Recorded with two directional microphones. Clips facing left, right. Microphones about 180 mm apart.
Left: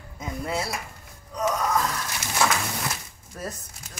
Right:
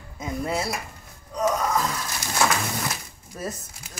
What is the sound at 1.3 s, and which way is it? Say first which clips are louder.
Gasp: right 1 dB; 5° right (ahead or behind).